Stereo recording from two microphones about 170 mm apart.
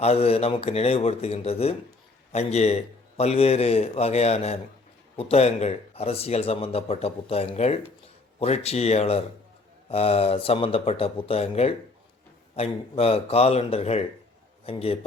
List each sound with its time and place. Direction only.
0.0 s speech: 35° left (ahead or behind)